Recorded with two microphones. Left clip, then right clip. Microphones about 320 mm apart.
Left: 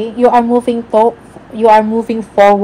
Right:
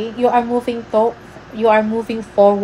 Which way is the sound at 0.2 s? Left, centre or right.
Left.